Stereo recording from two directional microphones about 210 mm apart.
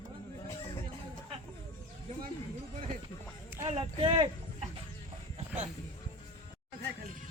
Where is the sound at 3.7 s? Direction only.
25° right (ahead or behind).